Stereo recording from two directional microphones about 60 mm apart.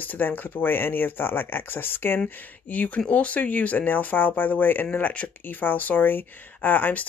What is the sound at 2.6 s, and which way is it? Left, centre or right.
Speech, left.